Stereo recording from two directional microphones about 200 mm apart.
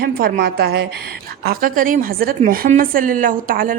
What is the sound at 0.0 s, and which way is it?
A woman's voice, 50° right (ahead or behind).